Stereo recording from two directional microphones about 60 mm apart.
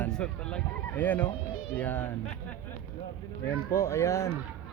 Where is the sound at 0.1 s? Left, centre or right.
Centre.